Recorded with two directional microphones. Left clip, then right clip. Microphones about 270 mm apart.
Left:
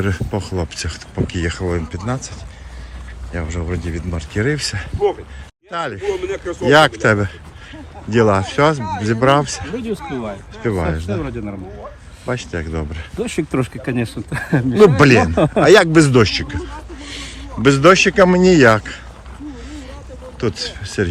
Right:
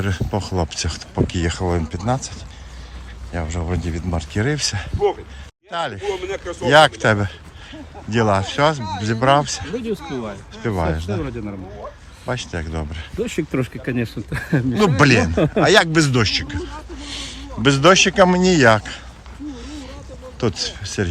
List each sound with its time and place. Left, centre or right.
0.0 s speech: centre
3.3 s speech: centre
6.2 s speech: right
6.7 s speech: centre
13.1 s speech: centre
20.4 s speech: centre